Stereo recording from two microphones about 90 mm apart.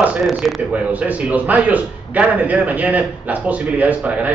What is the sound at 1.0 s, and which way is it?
A man's voice, 15° right (ahead or behind).